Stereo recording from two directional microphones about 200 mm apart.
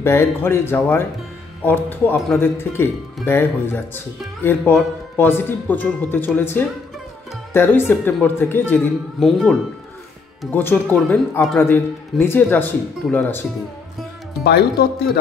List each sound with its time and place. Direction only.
0.0 s speech: 10° left (ahead or behind)
14.4 s speech: 55° left (ahead or behind)